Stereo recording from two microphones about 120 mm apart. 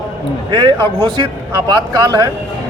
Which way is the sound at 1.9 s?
35° right (ahead or behind).